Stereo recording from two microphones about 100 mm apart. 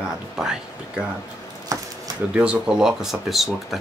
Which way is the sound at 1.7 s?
30° right (ahead or behind).